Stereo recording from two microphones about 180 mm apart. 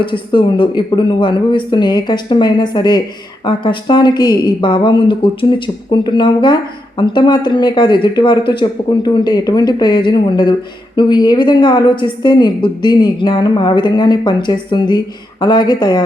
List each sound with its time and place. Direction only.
0.0 s speech: 25° left (ahead or behind)